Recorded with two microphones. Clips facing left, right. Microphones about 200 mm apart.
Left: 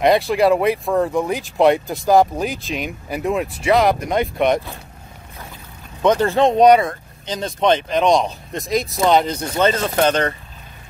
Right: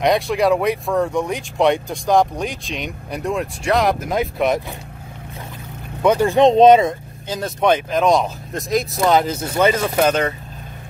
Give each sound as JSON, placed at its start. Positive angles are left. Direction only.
{"t": 0.0, "sound": "speech", "side_deg": 0}
{"t": 6.0, "sound": "speech", "side_deg": -15}
{"t": 7.2, "sound": "speech", "side_deg": -5}